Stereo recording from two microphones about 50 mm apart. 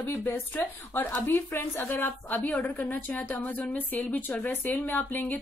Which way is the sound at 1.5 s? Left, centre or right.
Left.